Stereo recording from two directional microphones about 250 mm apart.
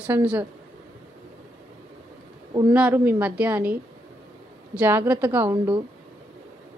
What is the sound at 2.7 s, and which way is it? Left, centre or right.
A woman's voice, centre.